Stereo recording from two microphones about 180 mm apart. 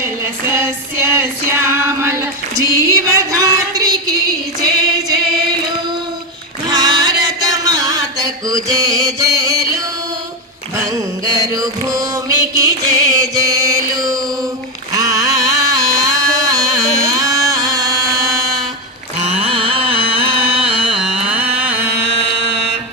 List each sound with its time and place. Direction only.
0.0 s female singing: 15° right (ahead or behind)
6.7 s music: 25° right (ahead or behind)
11.3 s music: 20° right (ahead or behind)
14.9 s a sound: 20° right (ahead or behind)
19.5 s carnatic music: 30° right (ahead or behind)
21.0 s music: 5° right (ahead or behind)
21.6 s a sound: 10° right (ahead or behind)